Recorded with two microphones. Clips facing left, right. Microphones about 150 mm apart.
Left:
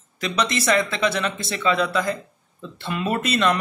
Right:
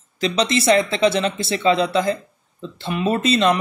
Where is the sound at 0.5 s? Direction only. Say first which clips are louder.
Right 6 dB; 25° right (ahead or behind).